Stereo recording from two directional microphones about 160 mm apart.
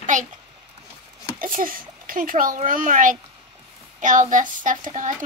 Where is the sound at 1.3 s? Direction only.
60° right (ahead or behind).